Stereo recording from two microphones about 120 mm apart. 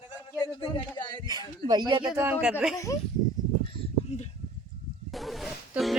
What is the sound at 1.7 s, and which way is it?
Speech, 35° right (ahead or behind).